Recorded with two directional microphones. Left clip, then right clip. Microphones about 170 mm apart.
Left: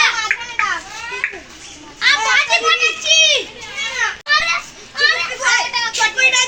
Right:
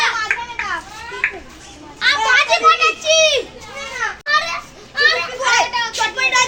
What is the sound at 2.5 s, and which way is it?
Speech, 40° right (ahead or behind).